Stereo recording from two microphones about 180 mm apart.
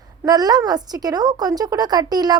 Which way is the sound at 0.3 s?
20° right (ahead or behind).